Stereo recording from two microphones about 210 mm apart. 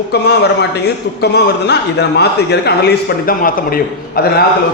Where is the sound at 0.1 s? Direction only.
50° left (ahead or behind).